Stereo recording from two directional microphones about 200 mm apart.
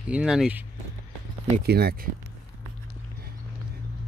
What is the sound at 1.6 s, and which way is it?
Speech, 50° right (ahead or behind).